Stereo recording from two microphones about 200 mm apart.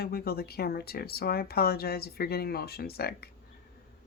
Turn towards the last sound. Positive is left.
turn(degrees=50)  # may be behind; listen again after turning